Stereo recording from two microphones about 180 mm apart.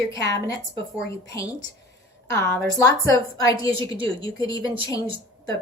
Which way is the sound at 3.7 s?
30° right (ahead or behind).